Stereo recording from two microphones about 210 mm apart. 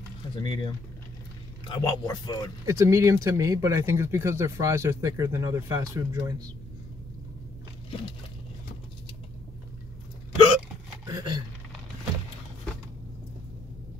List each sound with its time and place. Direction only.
0.4 s speech: 20° left (ahead or behind)
1.7 s speech: 20° left (ahead or behind)
2.6 s speech: 15° right (ahead or behind)
10.3 s hiccup: 25° left (ahead or behind)
11.1 s a sound: 20° right (ahead or behind)